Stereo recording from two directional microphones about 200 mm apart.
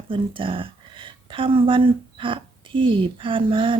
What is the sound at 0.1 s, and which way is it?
Speech, 25° right (ahead or behind).